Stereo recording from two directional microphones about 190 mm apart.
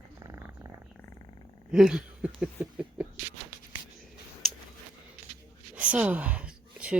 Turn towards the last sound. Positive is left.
turn(degrees=-5)  # may be behind; listen again after turning